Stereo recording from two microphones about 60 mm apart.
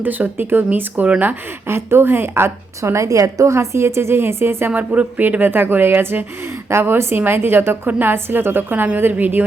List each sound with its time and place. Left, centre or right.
0.0 s a woman's voice: right
4.7 s a woman's voice: right